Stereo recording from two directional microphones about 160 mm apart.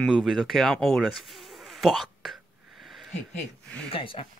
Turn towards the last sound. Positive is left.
turn(degrees=35)  # may be behind; listen again after turning